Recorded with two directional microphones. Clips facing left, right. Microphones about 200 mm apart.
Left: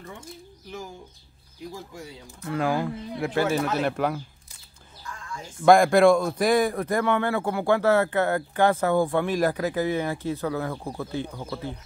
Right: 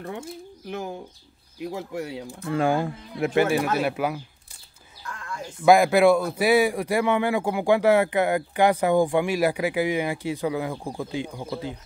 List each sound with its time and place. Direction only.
0.7 s speech: 65° right (ahead or behind)
2.2 s a man's voice: 30° right (ahead or behind); by 4.2 s 5° right (ahead or behind)
5.0 s a sound: 65° right (ahead or behind)
5.7 s a man's voice: 5° right (ahead or behind)